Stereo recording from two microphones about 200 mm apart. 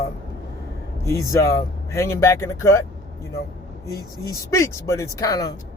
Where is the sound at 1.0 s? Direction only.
15° left (ahead or behind).